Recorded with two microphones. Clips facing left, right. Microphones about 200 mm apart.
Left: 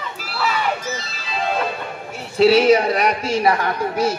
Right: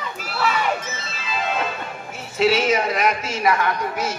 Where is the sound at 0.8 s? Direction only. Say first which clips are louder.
Left 3 dB; 35° left (ahead or behind).